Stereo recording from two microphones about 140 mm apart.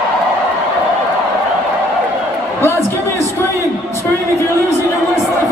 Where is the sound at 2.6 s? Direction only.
20° left (ahead or behind).